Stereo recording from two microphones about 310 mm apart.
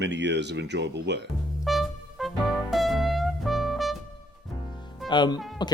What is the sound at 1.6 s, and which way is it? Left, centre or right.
Music, centre.